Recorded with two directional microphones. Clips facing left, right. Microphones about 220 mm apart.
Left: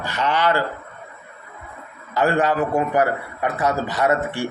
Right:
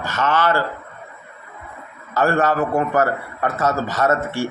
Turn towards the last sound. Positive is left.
turn(degrees=15)  # may be behind; listen again after turning